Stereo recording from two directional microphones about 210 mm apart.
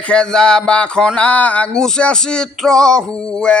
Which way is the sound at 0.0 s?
5° left (ahead or behind).